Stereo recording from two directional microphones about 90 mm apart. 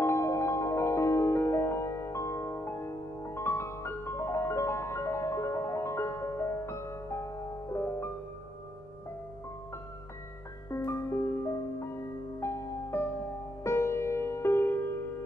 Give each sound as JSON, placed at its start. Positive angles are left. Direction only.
{"t": 0.0, "sound": "music", "side_deg": 30}
{"t": 10.7, "sound": "music", "side_deg": 30}